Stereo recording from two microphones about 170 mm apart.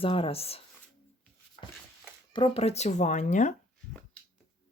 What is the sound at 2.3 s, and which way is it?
Speech, 30° left (ahead or behind).